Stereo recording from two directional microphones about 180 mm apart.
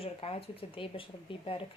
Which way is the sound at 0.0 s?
30° left (ahead or behind).